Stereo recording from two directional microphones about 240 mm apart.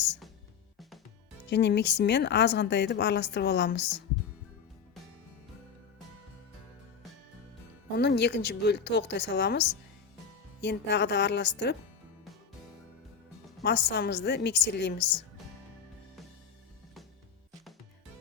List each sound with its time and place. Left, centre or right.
1.5 s speech: left
7.9 s speech: left
13.6 s speech: left